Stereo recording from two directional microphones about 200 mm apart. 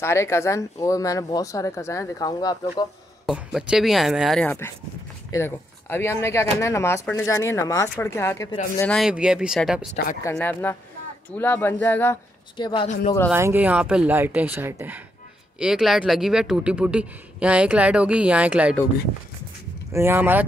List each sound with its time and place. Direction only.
0.0 s speech: 15° left (ahead or behind)
3.3 s speech: 5° right (ahead or behind)
12.5 s speech: 20° left (ahead or behind)
12.8 s speech: 35° left (ahead or behind)
13.3 s speech: 10° right (ahead or behind)
19.9 s speech: 10° right (ahead or behind)